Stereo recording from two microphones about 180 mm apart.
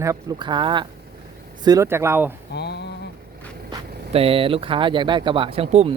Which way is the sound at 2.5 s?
70° left (ahead or behind).